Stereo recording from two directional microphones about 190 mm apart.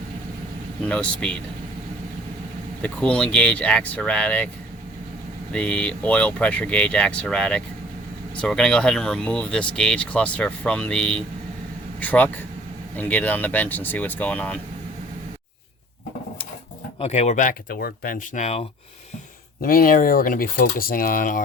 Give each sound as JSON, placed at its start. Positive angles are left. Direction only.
{"t": 0.9, "sound": "speech", "side_deg": 5}
{"t": 2.8, "sound": "speech", "side_deg": 5}
{"t": 5.5, "sound": "speech", "side_deg": 5}
{"t": 17.0, "sound": "speech", "side_deg": 35}
{"t": 19.6, "sound": "speech", "side_deg": 50}